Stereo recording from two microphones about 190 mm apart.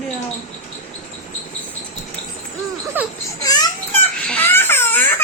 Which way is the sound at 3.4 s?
20° left (ahead or behind).